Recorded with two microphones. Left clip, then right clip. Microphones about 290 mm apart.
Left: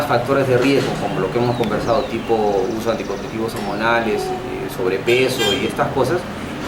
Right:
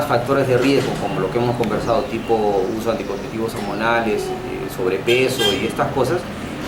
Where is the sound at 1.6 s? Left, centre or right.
Centre.